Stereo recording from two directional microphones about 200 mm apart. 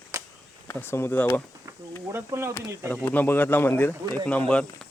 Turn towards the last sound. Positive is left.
turn(degrees=5)  # may be behind; listen again after turning